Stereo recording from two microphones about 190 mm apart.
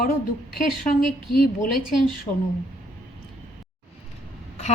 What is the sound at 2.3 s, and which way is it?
Speech, 25° left (ahead or behind).